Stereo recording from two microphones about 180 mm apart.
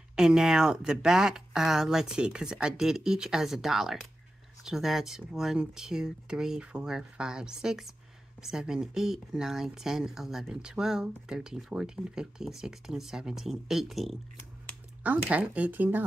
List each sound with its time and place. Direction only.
0.1 s speech: 5° right (ahead or behind)